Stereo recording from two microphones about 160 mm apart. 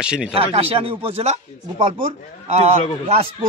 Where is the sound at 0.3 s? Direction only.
35° right (ahead or behind).